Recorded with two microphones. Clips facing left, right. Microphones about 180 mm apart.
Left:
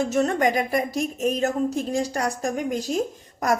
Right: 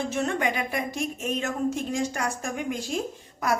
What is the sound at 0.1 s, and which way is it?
A woman's voice, 40° left (ahead or behind).